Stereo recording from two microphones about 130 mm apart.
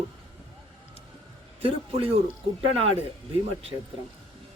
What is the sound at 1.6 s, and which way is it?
Speech, 45° right (ahead or behind).